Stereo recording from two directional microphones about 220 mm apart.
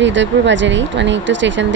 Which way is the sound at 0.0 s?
55° right (ahead or behind).